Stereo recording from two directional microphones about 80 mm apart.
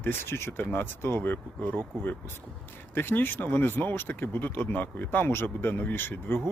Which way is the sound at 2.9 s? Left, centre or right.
Left.